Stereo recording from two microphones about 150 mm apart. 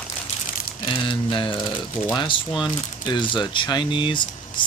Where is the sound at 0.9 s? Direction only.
35° left (ahead or behind).